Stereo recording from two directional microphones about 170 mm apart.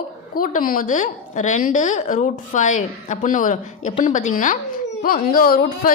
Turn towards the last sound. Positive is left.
turn(degrees=55)  # may be behind; listen again after turning